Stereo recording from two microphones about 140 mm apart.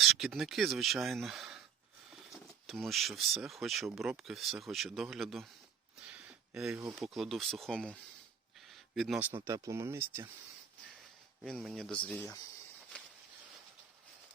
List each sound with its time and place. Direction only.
0.0 s speech: centre (ahead or behind)
2.6 s speech: centre (ahead or behind)
6.5 s speech: 5° right (ahead or behind)
6.7 s speech: 20° right (ahead or behind)
7.0 s speech: centre (ahead or behind)
8.7 s a sound: centre (ahead or behind)
9.2 s speech: 20° right (ahead or behind)
11.4 s speech: centre (ahead or behind)